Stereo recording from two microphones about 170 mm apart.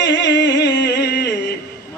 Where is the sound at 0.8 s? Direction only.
80° left.